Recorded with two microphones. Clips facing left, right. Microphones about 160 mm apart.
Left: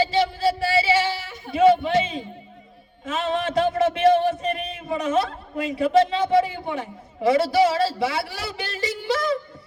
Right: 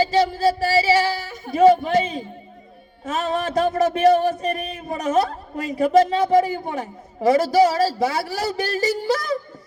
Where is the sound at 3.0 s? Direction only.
45° right (ahead or behind).